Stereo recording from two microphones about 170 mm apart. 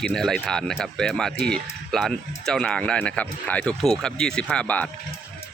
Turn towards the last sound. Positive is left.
turn(degrees=5)  # may be behind; listen again after turning